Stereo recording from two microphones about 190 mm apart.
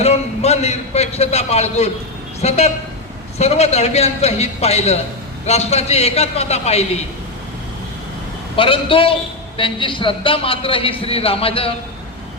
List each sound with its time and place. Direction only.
0.0 s a man's voice: 35° left (ahead or behind)
8.5 s a man's voice: 30° left (ahead or behind)